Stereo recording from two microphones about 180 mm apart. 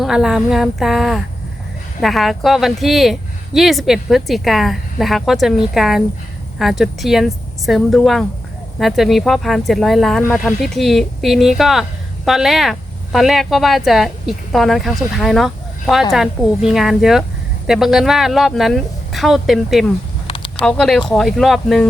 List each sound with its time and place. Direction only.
0.0 s a woman's voice: centre (ahead or behind)
20.2 s a sound: 30° left (ahead or behind)
20.6 s a woman's voice: 5° left (ahead or behind)